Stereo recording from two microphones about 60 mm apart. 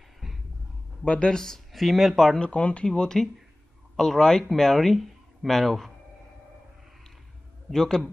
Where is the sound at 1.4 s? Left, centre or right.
Centre.